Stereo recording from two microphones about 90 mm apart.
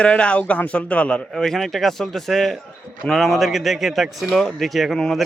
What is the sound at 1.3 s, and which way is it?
Speech, 5° left (ahead or behind).